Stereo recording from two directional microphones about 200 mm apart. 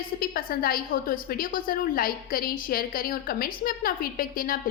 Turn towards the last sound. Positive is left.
turn(degrees=45)  # may be behind; listen again after turning